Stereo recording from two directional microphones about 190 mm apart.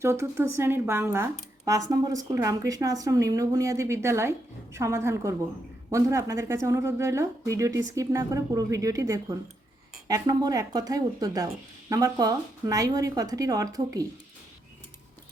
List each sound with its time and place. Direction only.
0.0 s speech: 15° right (ahead or behind)